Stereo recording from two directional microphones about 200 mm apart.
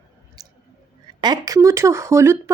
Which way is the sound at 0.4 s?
20° right (ahead or behind).